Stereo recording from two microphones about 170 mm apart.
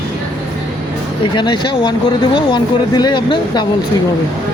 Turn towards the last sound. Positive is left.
turn(degrees=25)  # may be behind; listen again after turning